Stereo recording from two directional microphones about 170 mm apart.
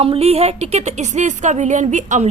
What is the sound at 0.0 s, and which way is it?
A woman's voice, 35° right (ahead or behind).